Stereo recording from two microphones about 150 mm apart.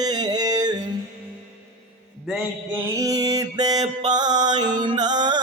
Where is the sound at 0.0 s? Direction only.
25° right (ahead or behind).